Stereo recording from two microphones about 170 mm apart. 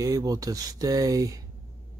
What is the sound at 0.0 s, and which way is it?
Speech, 20° right (ahead or behind).